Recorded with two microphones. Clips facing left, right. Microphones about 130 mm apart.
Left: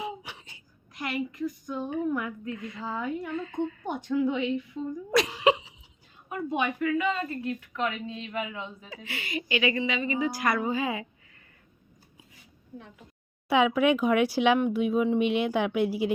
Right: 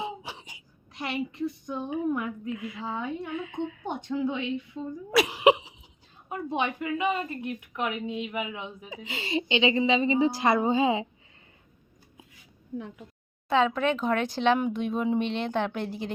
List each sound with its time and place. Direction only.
0.0 s a sound: 25° right (ahead or behind)
0.9 s a woman's voice: 25° right (ahead or behind)
1.9 s a woman's voice: 10° right (ahead or behind)
3.8 s a woman's voice: 25° right (ahead or behind)
5.1 s a woman's voice: 10° right (ahead or behind)
5.4 s a sound: 15° right (ahead or behind)
6.2 s a woman's voice: 25° right (ahead or behind)
13.5 s speech: 10° left (ahead or behind)